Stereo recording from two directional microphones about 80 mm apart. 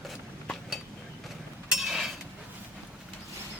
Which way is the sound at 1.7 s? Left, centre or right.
Centre.